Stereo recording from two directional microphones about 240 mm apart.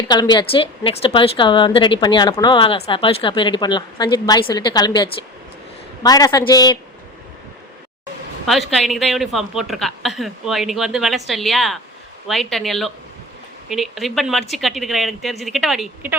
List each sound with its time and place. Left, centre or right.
0.1 s a woman's voice: centre
8.4 s a woman's voice: centre